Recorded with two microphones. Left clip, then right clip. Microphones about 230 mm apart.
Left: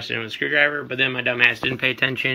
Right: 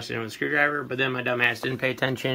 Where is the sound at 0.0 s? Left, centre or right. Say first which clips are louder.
Left 4 dB; centre.